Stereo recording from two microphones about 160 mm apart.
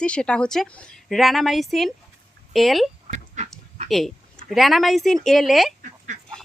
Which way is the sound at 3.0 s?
45° right (ahead or behind).